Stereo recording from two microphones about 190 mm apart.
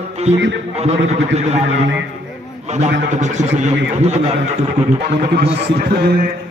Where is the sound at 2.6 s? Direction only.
35° right (ahead or behind).